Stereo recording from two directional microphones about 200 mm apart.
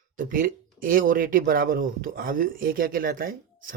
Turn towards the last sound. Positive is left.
turn(degrees=-45)  # may be behind; listen again after turning